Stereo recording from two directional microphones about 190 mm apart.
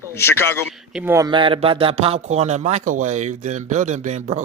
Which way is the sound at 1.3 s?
25° right (ahead or behind).